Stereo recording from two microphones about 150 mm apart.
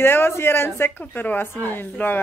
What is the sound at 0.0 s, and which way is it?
Speech, 15° left (ahead or behind).